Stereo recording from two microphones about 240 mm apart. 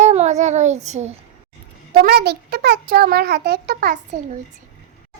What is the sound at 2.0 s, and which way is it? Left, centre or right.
A child's voice, right.